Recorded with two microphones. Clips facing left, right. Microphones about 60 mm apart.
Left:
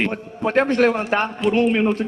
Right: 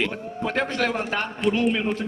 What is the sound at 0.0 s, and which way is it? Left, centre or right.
A man's voice, left.